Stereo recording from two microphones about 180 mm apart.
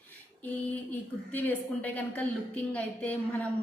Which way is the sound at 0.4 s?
10° left (ahead or behind).